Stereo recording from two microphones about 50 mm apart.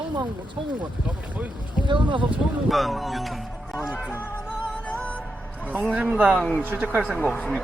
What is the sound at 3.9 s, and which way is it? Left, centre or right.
Music, left.